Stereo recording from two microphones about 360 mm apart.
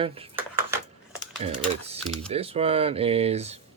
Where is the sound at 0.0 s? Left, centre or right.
Centre.